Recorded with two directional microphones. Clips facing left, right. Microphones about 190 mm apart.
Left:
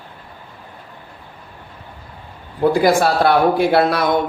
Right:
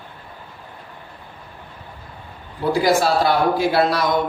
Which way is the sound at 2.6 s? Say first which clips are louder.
Left 3 dB; 55° left (ahead or behind).